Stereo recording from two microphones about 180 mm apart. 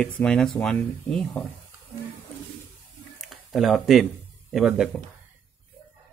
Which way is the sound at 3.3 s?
Centre (ahead or behind).